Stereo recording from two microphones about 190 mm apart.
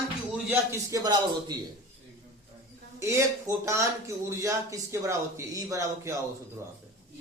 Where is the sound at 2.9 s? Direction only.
15° right (ahead or behind).